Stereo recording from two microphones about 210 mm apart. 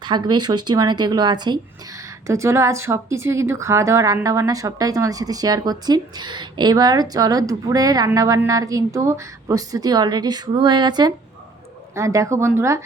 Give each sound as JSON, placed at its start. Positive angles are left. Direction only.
{"t": 0.0, "sound": "a woman's voice", "side_deg": -20}